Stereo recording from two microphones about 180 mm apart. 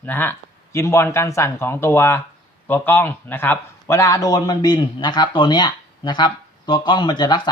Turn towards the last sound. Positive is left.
turn(degrees=25)  # may be behind; listen again after turning